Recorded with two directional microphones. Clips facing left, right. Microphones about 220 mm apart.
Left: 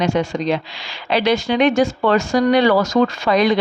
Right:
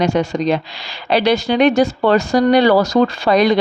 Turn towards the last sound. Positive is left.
turn(degrees=-40)  # may be behind; listen again after turning